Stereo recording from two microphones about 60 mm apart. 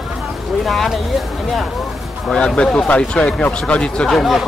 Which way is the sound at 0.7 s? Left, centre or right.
Centre.